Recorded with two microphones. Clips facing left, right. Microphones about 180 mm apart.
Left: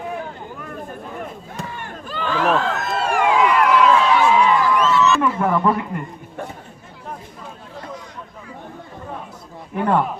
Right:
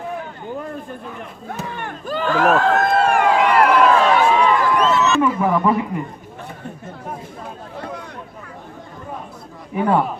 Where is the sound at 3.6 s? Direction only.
50° right (ahead or behind).